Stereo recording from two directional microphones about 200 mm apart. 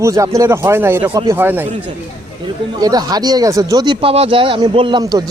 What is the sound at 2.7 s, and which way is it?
Speech, 20° right (ahead or behind).